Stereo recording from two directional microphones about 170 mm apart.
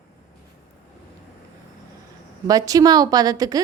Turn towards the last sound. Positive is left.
turn(degrees=-20)  # may be behind; listen again after turning